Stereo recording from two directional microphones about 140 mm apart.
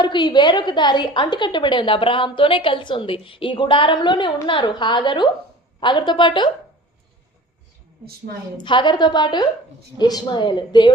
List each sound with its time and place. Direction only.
0.0 s a woman's voice: 35° left (ahead or behind)
8.5 s a woman's voice: 35° left (ahead or behind)